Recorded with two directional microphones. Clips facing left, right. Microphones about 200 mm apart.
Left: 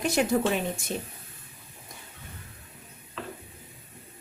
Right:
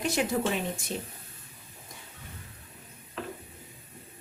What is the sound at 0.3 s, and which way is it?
Speech, 45° left (ahead or behind).